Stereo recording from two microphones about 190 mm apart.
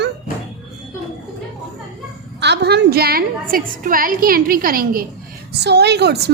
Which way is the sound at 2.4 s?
60° right (ahead or behind).